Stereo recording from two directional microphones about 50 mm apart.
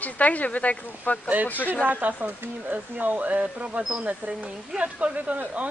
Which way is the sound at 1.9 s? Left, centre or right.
Right.